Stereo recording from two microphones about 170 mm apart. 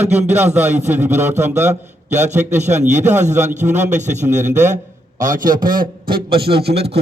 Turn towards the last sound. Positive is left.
turn(degrees=-75)  # may be behind; listen again after turning